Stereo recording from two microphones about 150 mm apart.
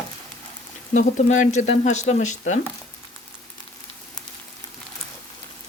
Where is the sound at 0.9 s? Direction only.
55° left (ahead or behind).